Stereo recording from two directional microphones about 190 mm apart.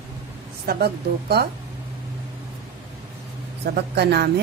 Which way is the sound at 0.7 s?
55° right (ahead or behind).